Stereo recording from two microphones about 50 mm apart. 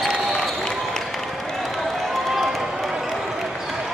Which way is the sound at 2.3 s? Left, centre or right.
Centre.